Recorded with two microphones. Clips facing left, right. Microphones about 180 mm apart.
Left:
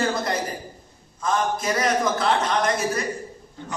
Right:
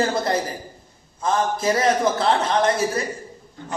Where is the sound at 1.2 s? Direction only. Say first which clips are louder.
Right 2 dB; 30° right (ahead or behind).